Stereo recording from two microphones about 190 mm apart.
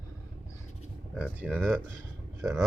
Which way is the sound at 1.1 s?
5° right (ahead or behind).